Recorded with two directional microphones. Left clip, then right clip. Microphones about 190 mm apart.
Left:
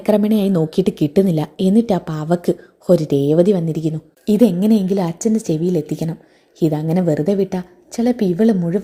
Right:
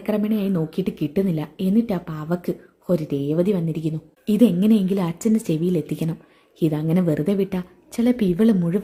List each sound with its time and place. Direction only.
0.0 s a woman's voice: 25° left (ahead or behind); by 8.8 s centre (ahead or behind)